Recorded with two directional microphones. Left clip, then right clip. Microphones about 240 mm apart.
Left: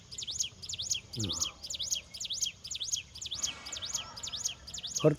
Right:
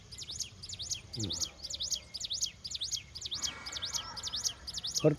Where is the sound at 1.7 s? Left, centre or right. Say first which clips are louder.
Left 1 dB; left.